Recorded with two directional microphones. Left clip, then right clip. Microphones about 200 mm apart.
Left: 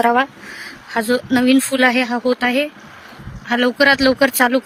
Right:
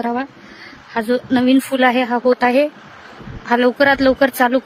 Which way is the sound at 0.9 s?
10° right (ahead or behind).